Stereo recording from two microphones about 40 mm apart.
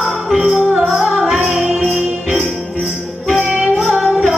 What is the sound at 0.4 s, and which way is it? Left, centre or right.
Music, centre.